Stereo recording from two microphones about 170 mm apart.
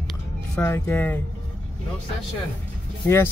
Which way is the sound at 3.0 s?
15° left (ahead or behind).